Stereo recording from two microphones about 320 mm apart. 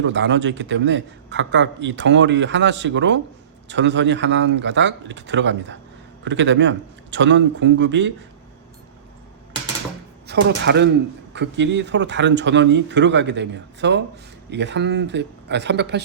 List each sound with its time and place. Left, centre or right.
0.0 s a man's voice: right
10.2 s a man's voice: right